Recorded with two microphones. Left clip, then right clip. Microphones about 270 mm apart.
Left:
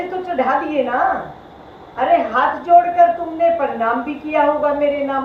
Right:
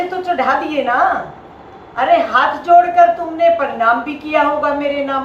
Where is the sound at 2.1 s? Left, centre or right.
Right.